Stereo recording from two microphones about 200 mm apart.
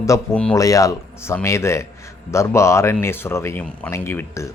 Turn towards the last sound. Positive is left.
turn(degrees=15)  # may be behind; listen again after turning